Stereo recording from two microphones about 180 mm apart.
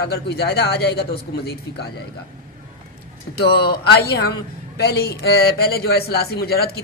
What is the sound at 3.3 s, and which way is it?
A man's voice, 65° left (ahead or behind).